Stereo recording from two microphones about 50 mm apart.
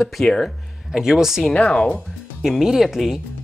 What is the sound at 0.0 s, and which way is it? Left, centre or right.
Speech, centre.